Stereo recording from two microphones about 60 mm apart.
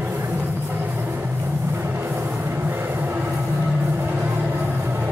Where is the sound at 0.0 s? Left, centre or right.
Right.